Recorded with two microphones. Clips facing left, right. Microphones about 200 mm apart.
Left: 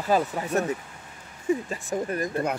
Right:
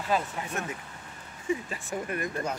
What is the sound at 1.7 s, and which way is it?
Speech, 40° left (ahead or behind).